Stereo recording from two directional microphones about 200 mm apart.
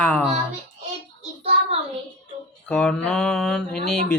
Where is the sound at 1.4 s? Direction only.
30° right (ahead or behind).